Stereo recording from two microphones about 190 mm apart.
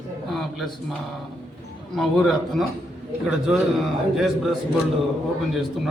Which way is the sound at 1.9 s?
Centre (ahead or behind).